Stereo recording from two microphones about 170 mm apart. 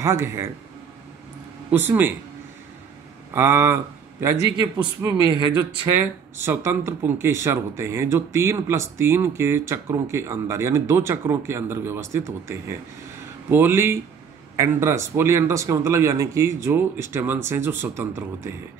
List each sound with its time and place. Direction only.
0.0 s speech: 15° right (ahead or behind)
1.7 s speech: 10° right (ahead or behind)
3.3 s speech: 15° right (ahead or behind)
5.0 s a man's voice: 25° right (ahead or behind)
5.6 s speech: 15° right (ahead or behind)